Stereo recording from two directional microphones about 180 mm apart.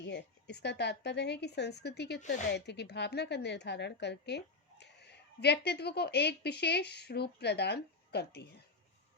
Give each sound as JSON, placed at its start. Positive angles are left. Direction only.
{"t": 0.0, "sound": "a woman's voice", "side_deg": 70}